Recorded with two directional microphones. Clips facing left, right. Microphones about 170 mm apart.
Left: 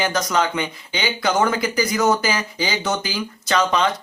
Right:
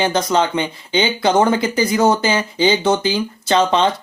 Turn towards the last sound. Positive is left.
turn(degrees=-30)  # may be behind; listen again after turning